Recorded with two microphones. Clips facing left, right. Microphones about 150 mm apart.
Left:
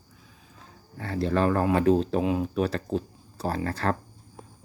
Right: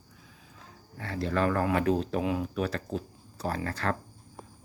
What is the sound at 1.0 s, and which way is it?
Speech, 35° left (ahead or behind).